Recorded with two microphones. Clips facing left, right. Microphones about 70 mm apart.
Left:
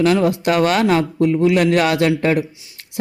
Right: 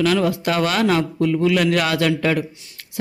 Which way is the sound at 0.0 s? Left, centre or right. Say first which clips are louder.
Left 3 dB; left.